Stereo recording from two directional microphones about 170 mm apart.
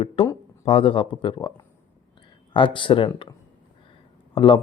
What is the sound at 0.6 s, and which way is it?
A man's voice, 35° left (ahead or behind).